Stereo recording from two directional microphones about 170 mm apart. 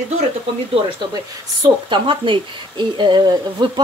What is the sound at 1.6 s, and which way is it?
Speech, 30° right (ahead or behind).